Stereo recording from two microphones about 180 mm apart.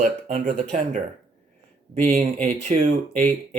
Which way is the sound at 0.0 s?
45° right (ahead or behind).